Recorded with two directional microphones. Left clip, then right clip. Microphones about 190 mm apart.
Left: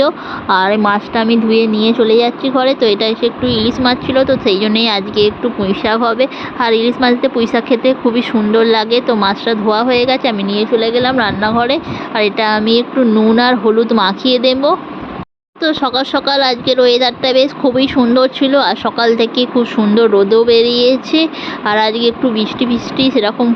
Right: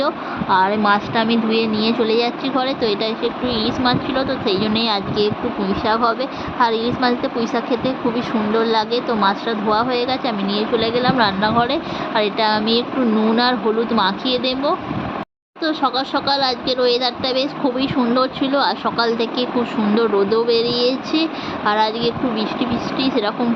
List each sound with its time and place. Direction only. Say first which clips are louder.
0.0 s speech: left 7 dB; 30° left (ahead or behind)